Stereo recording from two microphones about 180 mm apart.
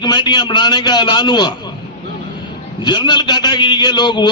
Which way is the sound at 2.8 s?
25° left (ahead or behind).